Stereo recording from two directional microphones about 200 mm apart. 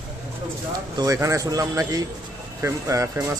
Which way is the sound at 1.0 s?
15° right (ahead or behind).